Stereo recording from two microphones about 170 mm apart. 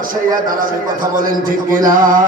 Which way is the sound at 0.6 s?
55° right (ahead or behind).